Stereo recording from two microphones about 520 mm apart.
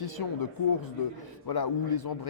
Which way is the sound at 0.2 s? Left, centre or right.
Left.